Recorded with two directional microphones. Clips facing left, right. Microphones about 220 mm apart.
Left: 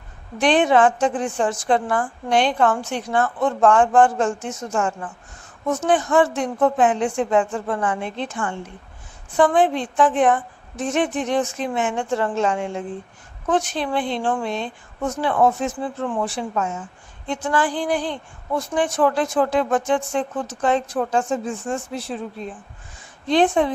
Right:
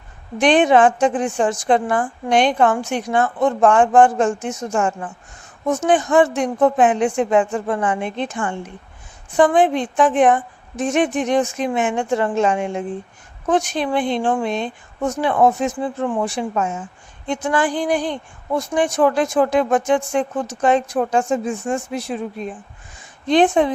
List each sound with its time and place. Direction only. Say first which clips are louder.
0.3 s speech: right 3 dB; 15° right (ahead or behind)